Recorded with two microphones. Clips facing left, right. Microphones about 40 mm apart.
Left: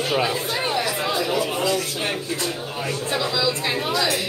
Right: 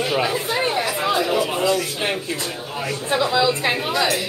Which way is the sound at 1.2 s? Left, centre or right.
Centre.